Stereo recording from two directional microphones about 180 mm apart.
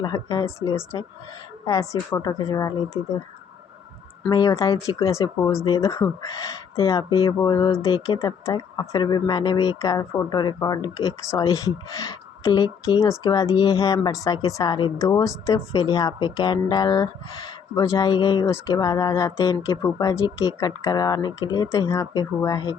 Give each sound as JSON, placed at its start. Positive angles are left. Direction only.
{"t": 0.0, "sound": "speech", "side_deg": 20}
{"t": 4.3, "sound": "speech", "side_deg": 20}
{"t": 7.1, "sound": "speech", "side_deg": 30}